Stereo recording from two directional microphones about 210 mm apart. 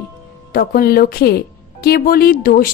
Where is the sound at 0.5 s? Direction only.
45° left (ahead or behind).